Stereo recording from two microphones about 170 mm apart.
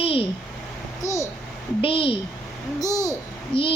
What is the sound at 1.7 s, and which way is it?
Speech, 30° left (ahead or behind).